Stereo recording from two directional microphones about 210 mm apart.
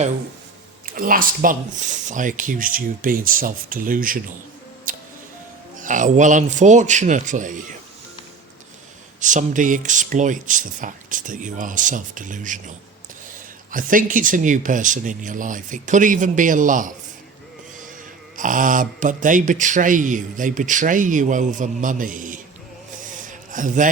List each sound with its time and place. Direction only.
0.9 s speech: 40° right (ahead or behind)
4.9 s music: 40° right (ahead or behind)
5.8 s speech: 35° right (ahead or behind)
9.2 s speech: 35° right (ahead or behind)
18.3 s speech: 40° right (ahead or behind)
23.2 s a sound: 40° right (ahead or behind)